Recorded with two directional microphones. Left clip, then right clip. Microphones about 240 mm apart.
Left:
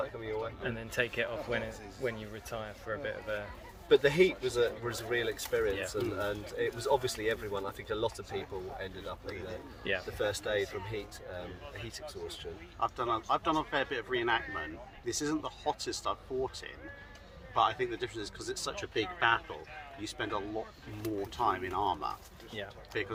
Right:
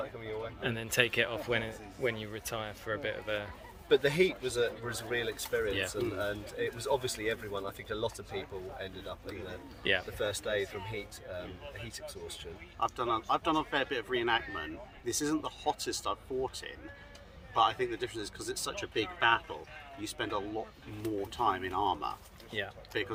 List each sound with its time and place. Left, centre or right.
0.6 s speech: right
3.8 s speech: centre
9.8 s speech: right
10.2 s speech: centre
12.8 s speech: centre
22.5 s speech: right
22.9 s speech: centre